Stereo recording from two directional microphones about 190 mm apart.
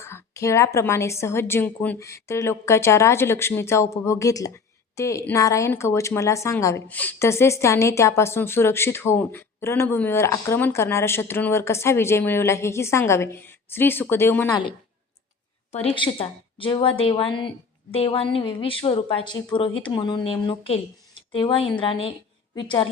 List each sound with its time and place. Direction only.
0.0 s a woman's voice: 15° left (ahead or behind)
15.7 s speech: 30° left (ahead or behind)